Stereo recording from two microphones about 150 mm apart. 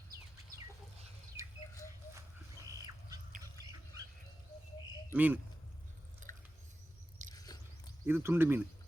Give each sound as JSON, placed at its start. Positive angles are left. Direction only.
{"t": 1.4, "sound": "rodents", "side_deg": 20}
{"t": 2.1, "sound": "a sound", "side_deg": -20}
{"t": 5.1, "sound": "speech", "side_deg": -10}
{"t": 6.3, "sound": "rodents", "side_deg": 20}
{"t": 7.3, "sound": "chewing", "side_deg": 25}
{"t": 8.0, "sound": "speech", "side_deg": -15}